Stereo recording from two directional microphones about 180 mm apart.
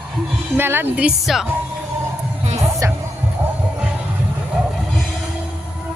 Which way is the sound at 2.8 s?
15° right (ahead or behind).